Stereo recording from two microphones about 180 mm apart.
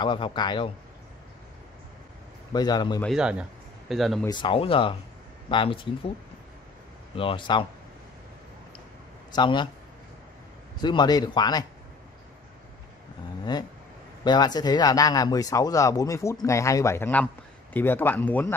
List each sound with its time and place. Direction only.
0.0 s speech: 25° left (ahead or behind)
2.5 s speech: 20° left (ahead or behind)
3.0 s a man's voice: centre (ahead or behind)
4.3 s speech: 25° left (ahead or behind)
7.2 s speech: 30° left (ahead or behind)
9.3 s speech: 25° left (ahead or behind)
10.8 s speech: 25° left (ahead or behind)
14.2 s a man's voice: 25° left (ahead or behind)